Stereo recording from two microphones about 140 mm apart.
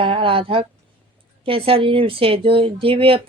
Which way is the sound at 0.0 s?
40° right (ahead or behind).